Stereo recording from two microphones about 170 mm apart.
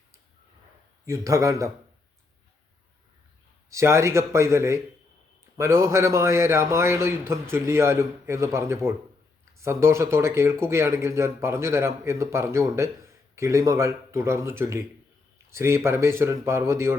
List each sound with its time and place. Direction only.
1.0 s speech: 20° right (ahead or behind)
3.7 s speech: 15° right (ahead or behind)